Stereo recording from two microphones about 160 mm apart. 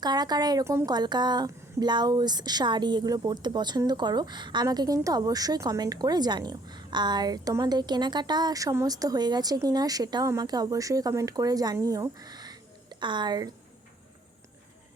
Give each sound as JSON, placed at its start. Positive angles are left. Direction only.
{"t": 0.0, "sound": "a woman's voice", "side_deg": -25}